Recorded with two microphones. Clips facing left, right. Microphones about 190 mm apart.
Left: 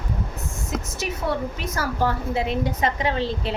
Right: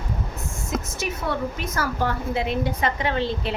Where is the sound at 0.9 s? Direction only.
35° left (ahead or behind).